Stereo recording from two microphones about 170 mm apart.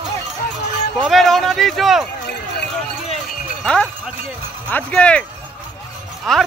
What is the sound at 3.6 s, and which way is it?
Speech, 5° left (ahead or behind).